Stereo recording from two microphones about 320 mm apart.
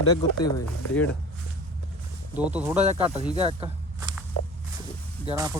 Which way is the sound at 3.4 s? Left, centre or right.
Centre.